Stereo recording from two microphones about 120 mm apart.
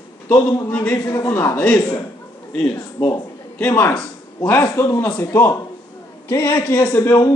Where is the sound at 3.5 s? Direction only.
10° left (ahead or behind).